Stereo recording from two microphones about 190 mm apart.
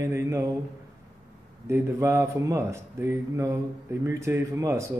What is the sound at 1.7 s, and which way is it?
Speech, 15° right (ahead or behind).